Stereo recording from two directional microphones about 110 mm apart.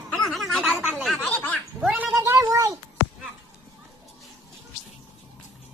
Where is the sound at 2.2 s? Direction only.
30° right (ahead or behind).